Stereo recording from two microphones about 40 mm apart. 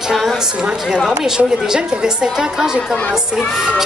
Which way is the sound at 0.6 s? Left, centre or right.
Right.